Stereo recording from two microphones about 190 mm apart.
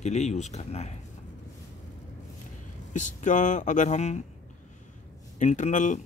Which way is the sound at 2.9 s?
40° left (ahead or behind).